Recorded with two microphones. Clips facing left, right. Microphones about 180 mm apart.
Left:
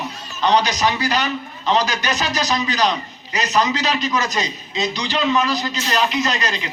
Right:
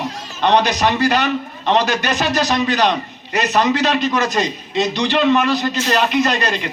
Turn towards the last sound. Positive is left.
turn(degrees=-55)  # may be behind; listen again after turning